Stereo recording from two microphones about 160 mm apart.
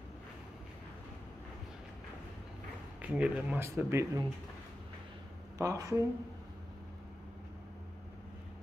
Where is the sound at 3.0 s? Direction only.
10° right (ahead or behind).